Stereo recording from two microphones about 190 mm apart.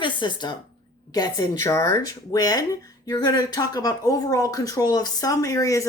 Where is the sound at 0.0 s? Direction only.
25° left (ahead or behind).